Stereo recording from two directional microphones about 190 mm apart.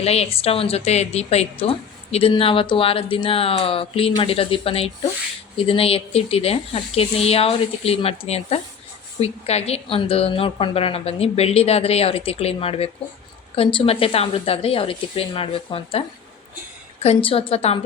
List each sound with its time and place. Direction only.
0.0 s a woman's voice: 35° left (ahead or behind)